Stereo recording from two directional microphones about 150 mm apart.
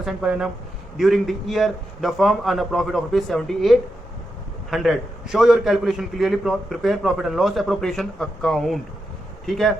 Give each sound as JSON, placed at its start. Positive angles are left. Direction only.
{"t": 0.0, "sound": "a man's voice", "side_deg": -5}